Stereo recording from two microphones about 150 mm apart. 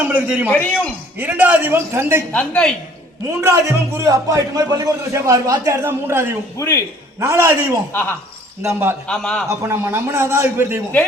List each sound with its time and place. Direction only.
0.0 s a man's voice: 10° right (ahead or behind)
0.5 s a woman's voice: 10° left (ahead or behind)
1.2 s a man's voice: 10° right (ahead or behind)
2.3 s a woman's voice: 10° left (ahead or behind)
3.2 s a man's voice: 20° right (ahead or behind)
6.6 s a man's voice: 20° left (ahead or behind)
7.2 s a man's voice: 15° right (ahead or behind)
9.0 s a man's voice: 5° left (ahead or behind)
9.5 s a man's voice: 20° right (ahead or behind)